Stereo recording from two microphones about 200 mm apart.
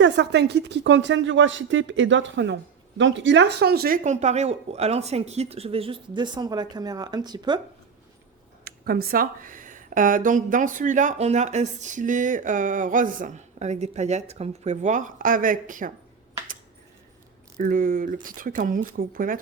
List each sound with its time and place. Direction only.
0.0 s speech: 60° right (ahead or behind); by 7.6 s 20° right (ahead or behind)
8.6 s speech: 50° right (ahead or behind)
17.6 s speech: 45° right (ahead or behind)